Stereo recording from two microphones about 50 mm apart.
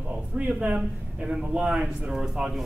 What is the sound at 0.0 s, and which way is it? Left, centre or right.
Speech, right.